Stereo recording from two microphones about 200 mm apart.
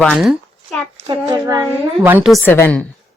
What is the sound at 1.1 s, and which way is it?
A woman's voice, 20° right (ahead or behind).